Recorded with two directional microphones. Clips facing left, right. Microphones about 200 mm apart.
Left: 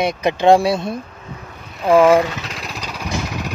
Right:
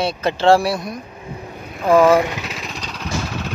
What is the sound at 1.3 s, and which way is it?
Vehicle, 25° right (ahead or behind).